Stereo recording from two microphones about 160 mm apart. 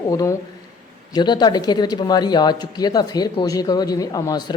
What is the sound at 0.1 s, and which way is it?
Speech, 20° left (ahead or behind).